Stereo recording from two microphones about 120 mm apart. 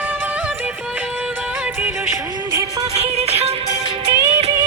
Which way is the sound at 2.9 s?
60° right (ahead or behind).